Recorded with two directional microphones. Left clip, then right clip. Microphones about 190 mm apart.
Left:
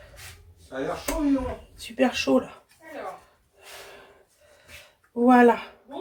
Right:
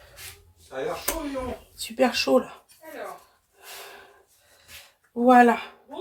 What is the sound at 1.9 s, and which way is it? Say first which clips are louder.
Speech: right 1 dB; 30° right (ahead or behind).